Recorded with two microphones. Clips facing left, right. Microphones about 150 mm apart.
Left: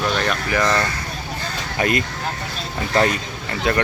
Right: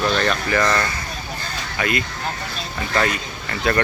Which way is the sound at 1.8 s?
40° left (ahead or behind).